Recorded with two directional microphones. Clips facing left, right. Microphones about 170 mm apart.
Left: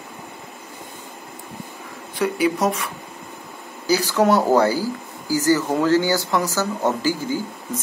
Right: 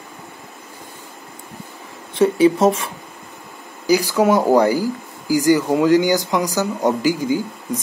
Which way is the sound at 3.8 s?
10° right (ahead or behind).